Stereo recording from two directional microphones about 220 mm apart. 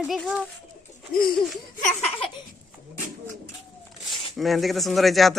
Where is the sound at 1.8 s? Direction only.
30° left (ahead or behind).